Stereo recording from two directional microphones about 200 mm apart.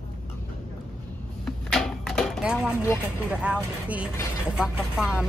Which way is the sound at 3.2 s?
5° right (ahead or behind).